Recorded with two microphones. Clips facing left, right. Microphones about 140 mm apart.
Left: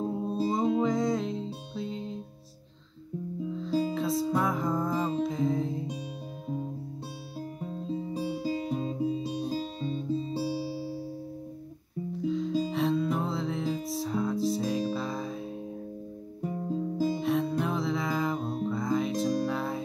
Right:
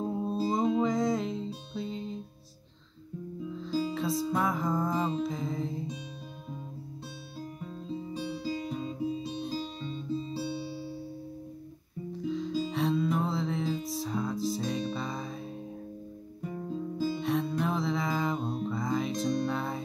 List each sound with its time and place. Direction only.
0.0 s music: centre (ahead or behind)
3.9 s music: centre (ahead or behind)
7.6 s guitar: 35° left (ahead or behind)
9.4 s music: 40° left (ahead or behind)
12.3 s music: centre (ahead or behind)
16.9 s music: 30° left (ahead or behind)
17.2 s music: centre (ahead or behind)